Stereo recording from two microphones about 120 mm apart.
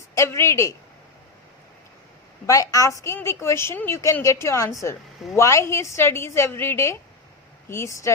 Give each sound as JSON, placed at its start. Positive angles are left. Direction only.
{"t": 0.1, "sound": "speech", "side_deg": 25}
{"t": 2.5, "sound": "a woman's voice", "side_deg": 25}